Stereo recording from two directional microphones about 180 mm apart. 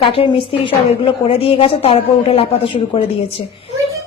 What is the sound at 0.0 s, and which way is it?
A woman's voice, 30° left (ahead or behind).